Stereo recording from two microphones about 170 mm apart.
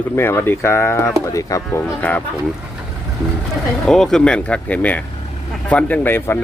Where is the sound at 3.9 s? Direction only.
5° left (ahead or behind).